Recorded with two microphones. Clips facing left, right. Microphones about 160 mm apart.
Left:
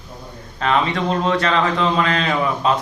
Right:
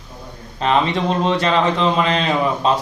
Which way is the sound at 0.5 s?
25° right (ahead or behind).